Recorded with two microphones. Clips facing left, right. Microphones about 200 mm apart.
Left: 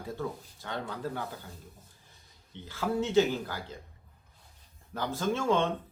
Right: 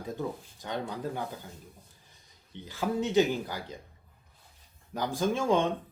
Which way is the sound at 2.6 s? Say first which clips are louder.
Right 1 dB; 15° right (ahead or behind).